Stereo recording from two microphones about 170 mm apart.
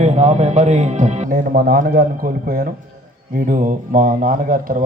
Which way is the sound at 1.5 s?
60° right (ahead or behind).